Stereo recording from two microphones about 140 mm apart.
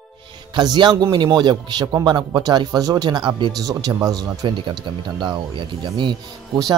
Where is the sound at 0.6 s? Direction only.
30° right (ahead or behind).